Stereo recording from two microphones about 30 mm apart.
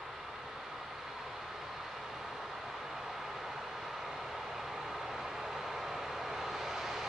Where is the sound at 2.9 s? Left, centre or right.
Centre.